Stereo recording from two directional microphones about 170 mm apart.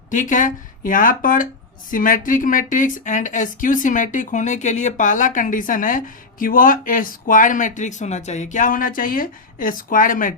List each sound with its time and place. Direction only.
0.1 s speech: 50° left (ahead or behind)